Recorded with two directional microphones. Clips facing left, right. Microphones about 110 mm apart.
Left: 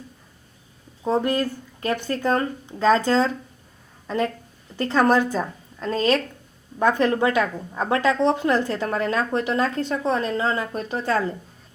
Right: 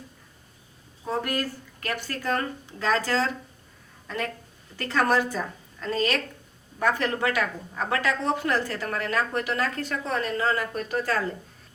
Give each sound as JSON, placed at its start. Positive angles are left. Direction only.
{"t": 1.0, "sound": "a woman's voice", "side_deg": 25}